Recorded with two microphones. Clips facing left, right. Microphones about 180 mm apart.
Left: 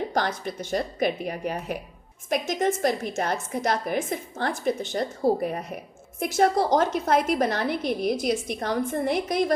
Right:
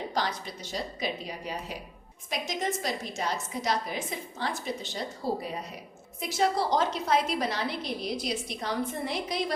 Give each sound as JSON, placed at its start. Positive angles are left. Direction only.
{"t": 0.1, "sound": "a woman's voice", "side_deg": 55}